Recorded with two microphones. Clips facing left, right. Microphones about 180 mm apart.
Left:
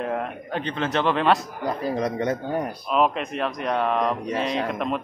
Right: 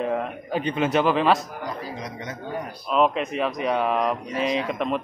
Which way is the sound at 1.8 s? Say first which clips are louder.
Left 9 dB; 55° left (ahead or behind).